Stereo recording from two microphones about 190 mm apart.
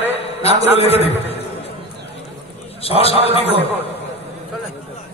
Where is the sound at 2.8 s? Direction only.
30° left (ahead or behind).